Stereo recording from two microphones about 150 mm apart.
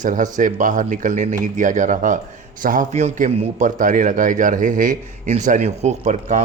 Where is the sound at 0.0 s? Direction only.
55° right (ahead or behind).